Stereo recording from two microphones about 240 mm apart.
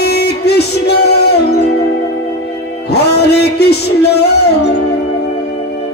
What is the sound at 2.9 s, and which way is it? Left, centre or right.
Music, left.